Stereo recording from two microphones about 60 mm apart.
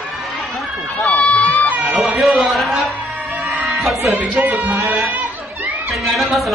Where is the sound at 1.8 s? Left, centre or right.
Centre.